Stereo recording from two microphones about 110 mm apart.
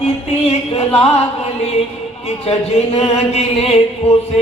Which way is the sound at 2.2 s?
70° left (ahead or behind).